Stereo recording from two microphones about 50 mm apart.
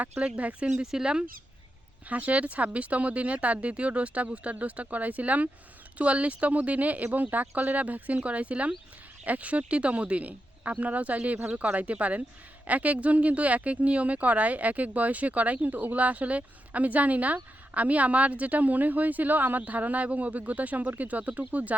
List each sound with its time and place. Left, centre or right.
0.2 s speech: right
0.8 s speech: centre
2.0 s speech: right